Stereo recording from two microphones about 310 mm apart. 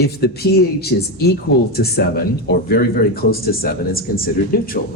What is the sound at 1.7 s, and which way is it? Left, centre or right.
Speech, left.